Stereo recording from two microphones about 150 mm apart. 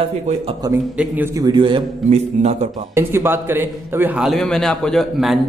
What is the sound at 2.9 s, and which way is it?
A man's voice, 15° right (ahead or behind).